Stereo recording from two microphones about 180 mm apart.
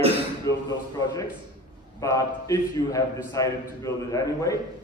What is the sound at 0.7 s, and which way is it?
A man's voice, 20° left (ahead or behind).